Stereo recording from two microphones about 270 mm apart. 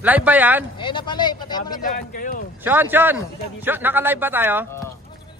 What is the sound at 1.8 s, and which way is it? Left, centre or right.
Speech, left.